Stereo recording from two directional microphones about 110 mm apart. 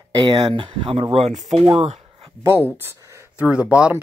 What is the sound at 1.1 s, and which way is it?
Speech, 80° right.